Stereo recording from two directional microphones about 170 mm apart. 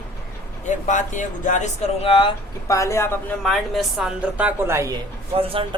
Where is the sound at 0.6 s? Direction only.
45° left (ahead or behind).